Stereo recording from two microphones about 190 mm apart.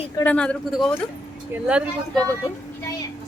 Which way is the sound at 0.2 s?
5° left (ahead or behind).